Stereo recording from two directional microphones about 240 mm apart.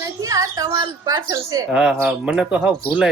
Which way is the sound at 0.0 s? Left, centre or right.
Centre.